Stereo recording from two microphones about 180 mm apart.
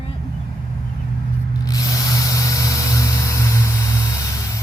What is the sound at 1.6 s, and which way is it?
Tools, 20° left (ahead or behind).